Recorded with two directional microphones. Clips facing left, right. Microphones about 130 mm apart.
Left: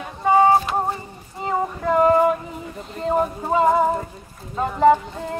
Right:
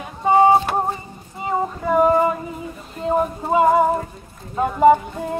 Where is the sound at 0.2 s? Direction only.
20° right (ahead or behind).